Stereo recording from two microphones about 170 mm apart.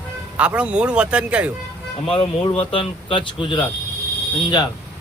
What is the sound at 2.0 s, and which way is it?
Speech, 35° left (ahead or behind).